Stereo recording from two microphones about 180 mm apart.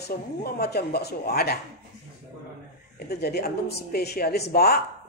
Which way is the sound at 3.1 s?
65° left (ahead or behind).